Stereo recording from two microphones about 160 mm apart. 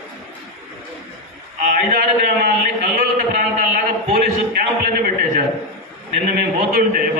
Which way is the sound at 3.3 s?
65° right (ahead or behind).